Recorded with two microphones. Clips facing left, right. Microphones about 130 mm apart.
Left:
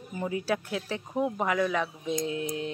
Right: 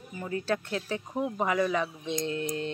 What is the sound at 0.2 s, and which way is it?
Speech, 10° left (ahead or behind).